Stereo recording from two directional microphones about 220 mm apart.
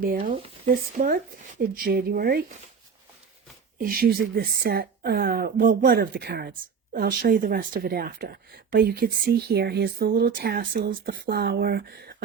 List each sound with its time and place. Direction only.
0.0 s speech: 40° right (ahead or behind)
3.8 s speech: 40° right (ahead or behind)